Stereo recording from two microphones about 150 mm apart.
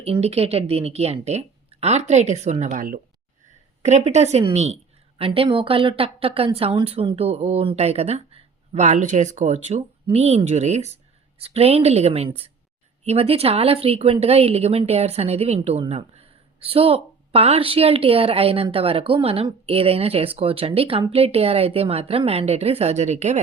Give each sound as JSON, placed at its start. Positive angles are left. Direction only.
{"t": 0.0, "sound": "speech", "side_deg": -45}
{"t": 3.8, "sound": "a woman's voice", "side_deg": -50}